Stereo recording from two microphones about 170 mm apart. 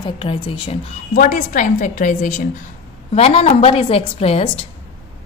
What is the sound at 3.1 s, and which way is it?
A woman's voice, 35° left (ahead or behind).